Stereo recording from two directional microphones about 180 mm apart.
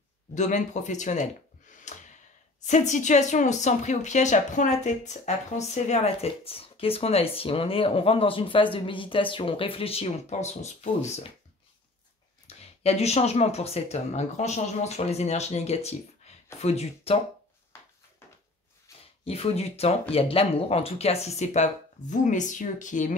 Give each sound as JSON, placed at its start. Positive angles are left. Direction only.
{"t": 0.3, "sound": "a woman's voice", "side_deg": 45}
{"t": 1.9, "sound": "gasp", "side_deg": 40}
{"t": 2.6, "sound": "a woman's voice", "side_deg": 40}
{"t": 12.4, "sound": "a woman's voice", "side_deg": 35}
{"t": 18.9, "sound": "a sound", "side_deg": 15}
{"t": 19.2, "sound": "a woman's voice", "side_deg": 35}